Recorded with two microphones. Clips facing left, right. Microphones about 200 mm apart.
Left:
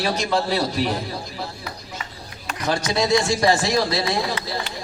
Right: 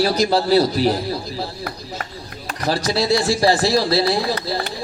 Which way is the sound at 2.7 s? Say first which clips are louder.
Right 1 dB; 35° right (ahead or behind).